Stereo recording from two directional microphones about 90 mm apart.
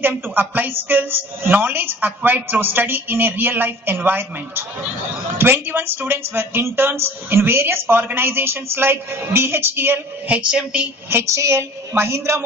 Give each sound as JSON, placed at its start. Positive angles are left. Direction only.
{"t": 0.0, "sound": "a woman's voice", "side_deg": -20}
{"t": 11.1, "sound": "a woman's voice", "side_deg": -30}